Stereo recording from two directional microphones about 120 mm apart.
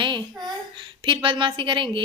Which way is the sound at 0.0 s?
40° right (ahead or behind).